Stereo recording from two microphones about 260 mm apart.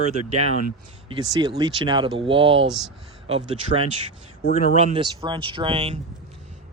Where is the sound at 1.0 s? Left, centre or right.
Centre.